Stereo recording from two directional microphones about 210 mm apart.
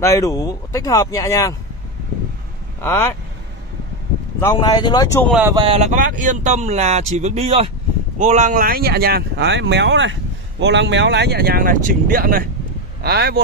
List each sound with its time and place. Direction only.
0.0 s speech: 15° left (ahead or behind)
2.8 s speech: 10° left (ahead or behind)
4.4 s speech: 15° left (ahead or behind)
5.5 s speech: 25° right (ahead or behind); by 13.4 s 50° right (ahead or behind)